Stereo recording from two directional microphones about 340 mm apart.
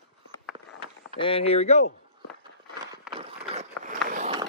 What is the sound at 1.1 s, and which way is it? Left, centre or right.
Speech, centre.